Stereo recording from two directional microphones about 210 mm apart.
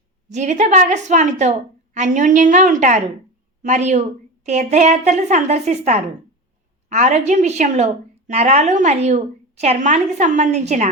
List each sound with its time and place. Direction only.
0.3 s a woman's voice: 35° right (ahead or behind)